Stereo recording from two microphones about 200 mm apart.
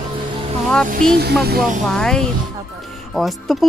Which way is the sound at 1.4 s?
50° right (ahead or behind).